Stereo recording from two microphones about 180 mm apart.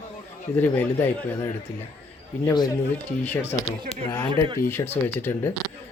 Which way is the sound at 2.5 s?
20° left (ahead or behind).